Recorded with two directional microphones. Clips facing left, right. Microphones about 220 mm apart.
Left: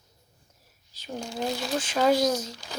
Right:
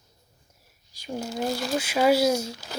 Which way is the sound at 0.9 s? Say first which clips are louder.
Right 3 dB; 10° right (ahead or behind).